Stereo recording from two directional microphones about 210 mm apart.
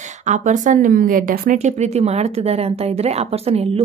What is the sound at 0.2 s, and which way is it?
A woman's voice, 35° right (ahead or behind).